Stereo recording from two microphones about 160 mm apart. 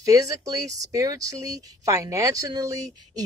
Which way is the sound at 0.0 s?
20° right (ahead or behind).